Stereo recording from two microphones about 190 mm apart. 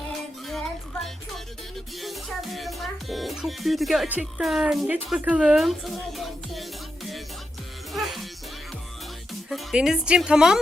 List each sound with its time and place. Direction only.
2.0 s speech: centre (ahead or behind)
9.5 s speech: centre (ahead or behind)